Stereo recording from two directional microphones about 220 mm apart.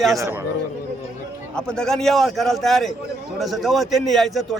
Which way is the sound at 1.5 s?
5° left (ahead or behind).